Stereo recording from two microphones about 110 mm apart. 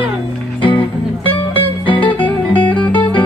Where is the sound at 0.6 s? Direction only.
50° left (ahead or behind).